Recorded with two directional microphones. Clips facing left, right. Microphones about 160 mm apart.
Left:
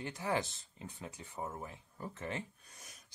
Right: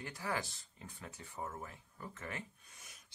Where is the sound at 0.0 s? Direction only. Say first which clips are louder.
Left 4 dB; 20° left (ahead or behind).